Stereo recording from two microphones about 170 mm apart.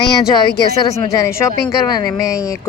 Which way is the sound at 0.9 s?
20° left (ahead or behind).